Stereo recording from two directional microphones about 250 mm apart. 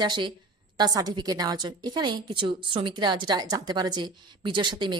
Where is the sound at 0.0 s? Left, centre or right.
Centre.